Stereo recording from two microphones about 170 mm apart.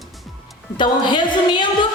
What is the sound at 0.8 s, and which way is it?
A woman's voice, 30° left (ahead or behind).